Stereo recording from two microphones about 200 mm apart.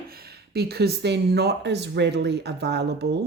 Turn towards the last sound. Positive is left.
turn(degrees=-55)  # may be behind; listen again after turning